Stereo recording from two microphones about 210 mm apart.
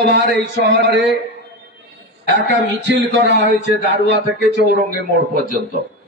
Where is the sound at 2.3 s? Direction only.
55° right (ahead or behind).